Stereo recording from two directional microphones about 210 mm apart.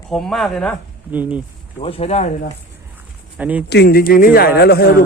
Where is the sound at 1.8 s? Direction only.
30° left (ahead or behind).